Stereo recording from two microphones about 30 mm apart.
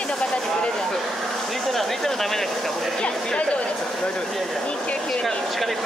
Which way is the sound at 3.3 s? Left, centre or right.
Left.